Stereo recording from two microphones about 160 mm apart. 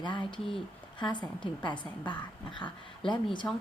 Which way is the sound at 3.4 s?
15° left (ahead or behind).